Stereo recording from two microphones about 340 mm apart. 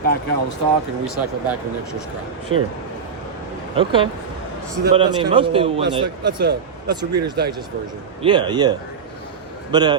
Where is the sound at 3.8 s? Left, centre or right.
Centre.